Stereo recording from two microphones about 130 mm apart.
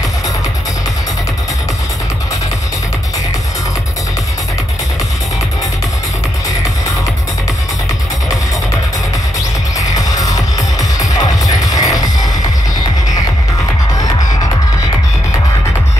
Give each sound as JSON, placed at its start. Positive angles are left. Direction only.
{"t": 9.8, "sound": "music", "side_deg": 30}